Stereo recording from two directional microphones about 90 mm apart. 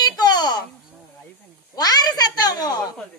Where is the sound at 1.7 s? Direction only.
45° left (ahead or behind).